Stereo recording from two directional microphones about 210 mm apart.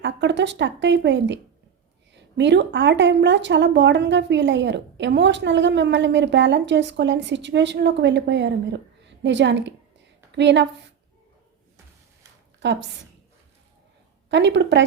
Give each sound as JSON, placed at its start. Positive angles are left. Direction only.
{"t": 0.0, "sound": "a woman's voice", "side_deg": -55}
{"t": 12.6, "sound": "a woman's voice", "side_deg": -55}
{"t": 14.3, "sound": "a woman's voice", "side_deg": -55}